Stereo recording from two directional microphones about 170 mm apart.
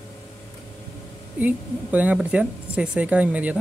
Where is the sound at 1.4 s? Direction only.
10° right (ahead or behind).